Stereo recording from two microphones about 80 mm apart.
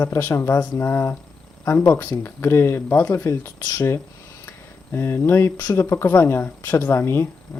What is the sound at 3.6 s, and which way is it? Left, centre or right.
Speech, left.